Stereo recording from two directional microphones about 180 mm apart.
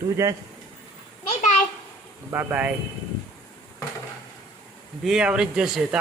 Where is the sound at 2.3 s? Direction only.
10° right (ahead or behind).